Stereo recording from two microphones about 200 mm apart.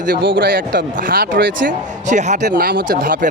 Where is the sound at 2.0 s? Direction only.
35° right (ahead or behind).